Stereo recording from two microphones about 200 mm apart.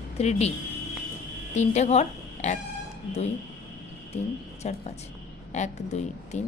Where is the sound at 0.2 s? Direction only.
30° left (ahead or behind).